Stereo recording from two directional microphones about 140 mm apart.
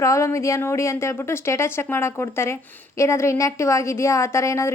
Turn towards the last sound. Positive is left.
turn(degrees=20)  # may be behind; listen again after turning